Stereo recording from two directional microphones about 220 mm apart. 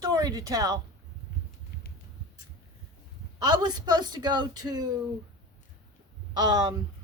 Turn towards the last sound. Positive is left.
turn(degrees=-20)  # may be behind; listen again after turning